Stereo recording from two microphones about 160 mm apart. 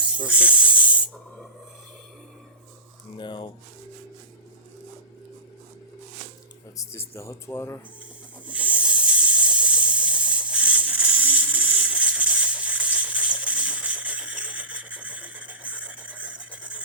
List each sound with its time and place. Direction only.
0.3 s snake: 10° right (ahead or behind)
3.2 s speech: 30° left (ahead or behind)
6.7 s speech: 15° left (ahead or behind)
8.4 s hiss: 10° right (ahead or behind)